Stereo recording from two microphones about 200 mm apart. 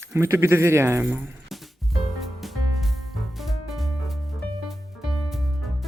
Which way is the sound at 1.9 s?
Centre (ahead or behind).